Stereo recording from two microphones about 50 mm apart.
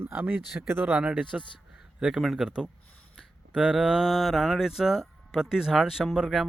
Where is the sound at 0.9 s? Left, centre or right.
Right.